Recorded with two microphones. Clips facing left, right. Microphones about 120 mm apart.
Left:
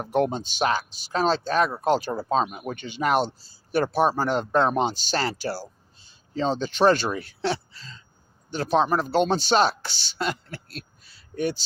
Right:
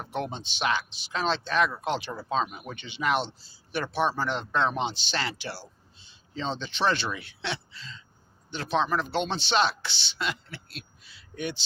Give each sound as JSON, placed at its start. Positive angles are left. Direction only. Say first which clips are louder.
{"t": 0.0, "sound": "speech", "louder": "left 9 dB", "side_deg": 45}